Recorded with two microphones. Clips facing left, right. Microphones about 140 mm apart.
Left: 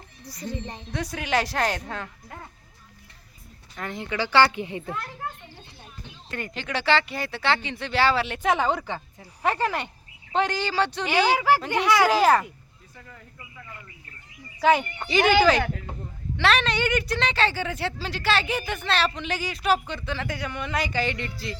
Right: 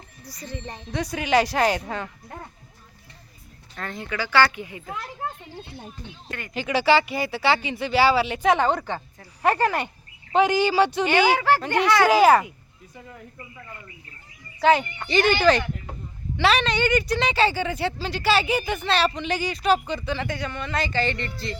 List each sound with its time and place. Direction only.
0.3 s speech: 25° left (ahead or behind)
0.9 s a woman's voice: centre (ahead or behind)
3.8 s speech: 20° left (ahead or behind)
6.5 s a woman's voice: 5° right (ahead or behind)
13.0 s speech: 15° right (ahead or behind)
14.6 s a woman's voice: 5° left (ahead or behind)